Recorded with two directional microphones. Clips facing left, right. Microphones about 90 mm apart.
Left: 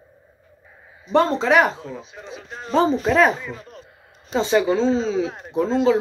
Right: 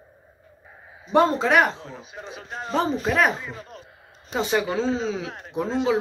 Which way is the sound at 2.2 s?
35° right (ahead or behind).